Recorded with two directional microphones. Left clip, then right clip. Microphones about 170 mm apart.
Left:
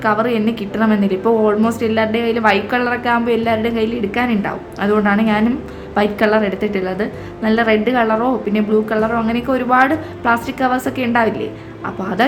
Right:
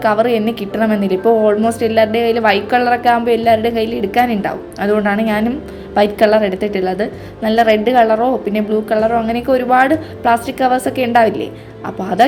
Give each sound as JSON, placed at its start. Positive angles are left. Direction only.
{"t": 0.0, "sound": "a woman's voice", "side_deg": -20}